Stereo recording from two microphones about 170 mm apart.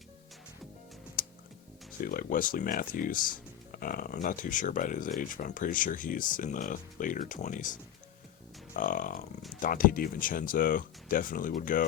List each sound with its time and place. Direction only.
1.2 s computer keyboard: 55° left (ahead or behind)
2.0 s speech: 55° left (ahead or behind)